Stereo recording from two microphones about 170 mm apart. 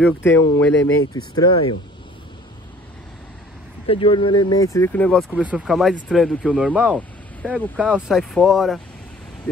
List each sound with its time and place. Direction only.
0.0 s speech: 15° left (ahead or behind)
1.1 s speech: 25° left (ahead or behind)
3.8 s speech: 30° left (ahead or behind); by 5.2 s 10° left (ahead or behind)
5.3 s speech: 10° right (ahead or behind)
6.5 s speech: 5° right (ahead or behind)